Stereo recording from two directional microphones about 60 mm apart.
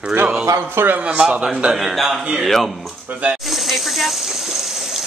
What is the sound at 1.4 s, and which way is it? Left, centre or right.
A man's voice, centre.